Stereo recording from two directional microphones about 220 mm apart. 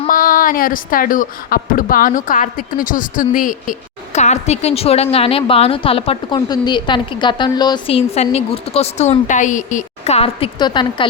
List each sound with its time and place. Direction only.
0.1 s a woman's voice: 40° left (ahead or behind); by 11.1 s 20° left (ahead or behind)